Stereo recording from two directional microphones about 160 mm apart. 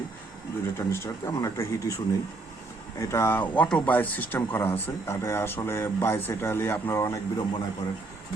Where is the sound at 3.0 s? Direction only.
15° left (ahead or behind).